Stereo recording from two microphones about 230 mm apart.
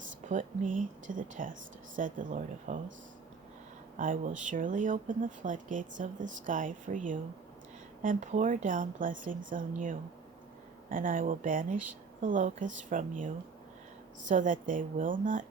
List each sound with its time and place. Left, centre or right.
0.3 s speech: right
3.9 s speech: right